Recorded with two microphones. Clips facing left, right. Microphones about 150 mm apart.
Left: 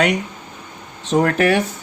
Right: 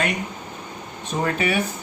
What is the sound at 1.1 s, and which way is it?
Speech, 80° left.